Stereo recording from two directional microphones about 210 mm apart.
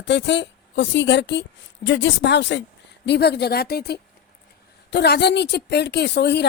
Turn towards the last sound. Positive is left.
turn(degrees=55)  # may be behind; listen again after turning